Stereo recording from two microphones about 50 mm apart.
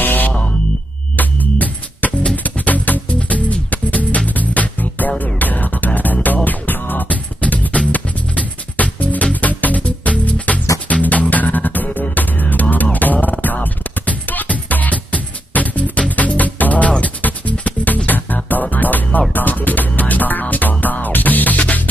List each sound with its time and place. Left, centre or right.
0.0 s music: left